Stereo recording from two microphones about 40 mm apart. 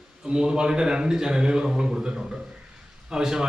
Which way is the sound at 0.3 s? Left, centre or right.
Right.